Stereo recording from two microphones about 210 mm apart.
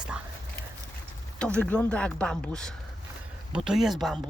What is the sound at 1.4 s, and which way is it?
Speech, 5° left (ahead or behind).